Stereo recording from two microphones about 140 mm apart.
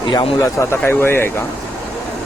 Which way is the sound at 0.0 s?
35° left (ahead or behind).